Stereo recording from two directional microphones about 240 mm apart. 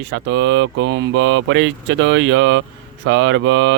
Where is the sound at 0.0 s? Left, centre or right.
Right.